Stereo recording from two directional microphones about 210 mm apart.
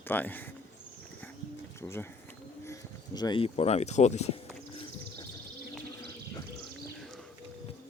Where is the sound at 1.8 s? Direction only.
10° left (ahead or behind); by 4.3 s 30° left (ahead or behind).